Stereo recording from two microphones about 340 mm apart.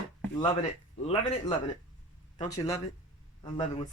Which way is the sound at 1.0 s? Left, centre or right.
Centre.